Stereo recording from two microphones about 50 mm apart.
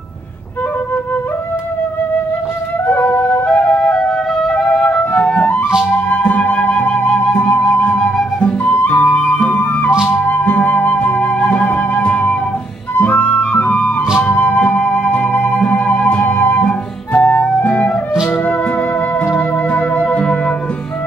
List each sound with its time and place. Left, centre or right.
2.9 s flute: left
3.4 s flute: left
4.6 s flute: left
7.2 s music: left
7.5 s flute: left
8.4 s music: left
10.0 s music: left
10.4 s flute: left
11.6 s music: left
14.2 s flute: left
16.0 s music: left
16.3 s music: left
16.6 s flute: left
18.3 s music: left